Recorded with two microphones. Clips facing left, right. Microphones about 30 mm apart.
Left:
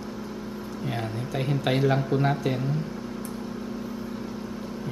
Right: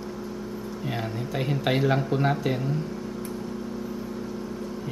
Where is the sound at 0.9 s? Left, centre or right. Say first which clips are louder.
Right 1 dB; centre.